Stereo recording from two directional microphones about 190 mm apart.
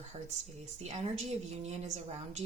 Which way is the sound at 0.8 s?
35° right (ahead or behind).